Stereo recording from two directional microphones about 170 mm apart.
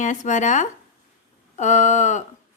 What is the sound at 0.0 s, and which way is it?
Speech, 45° left (ahead or behind).